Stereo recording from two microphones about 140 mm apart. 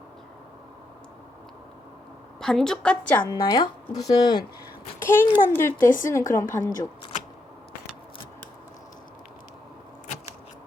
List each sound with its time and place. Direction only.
2.4 s a woman's voice: 5° left (ahead or behind)
3.2 s speech: 30° left (ahead or behind)
4.9 s a child's voice: 15° left (ahead or behind)
5.7 s speech: 70° left (ahead or behind)
6.1 s speech: 20° left (ahead or behind)
6.4 s speech: 65° left (ahead or behind)